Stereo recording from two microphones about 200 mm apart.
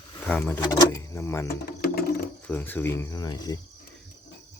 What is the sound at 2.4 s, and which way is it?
Speech, 10° left (ahead or behind).